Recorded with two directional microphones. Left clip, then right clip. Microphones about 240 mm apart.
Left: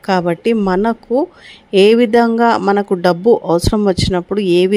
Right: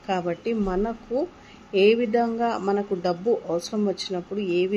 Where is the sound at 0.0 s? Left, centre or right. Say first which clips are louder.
Left 11 dB; left.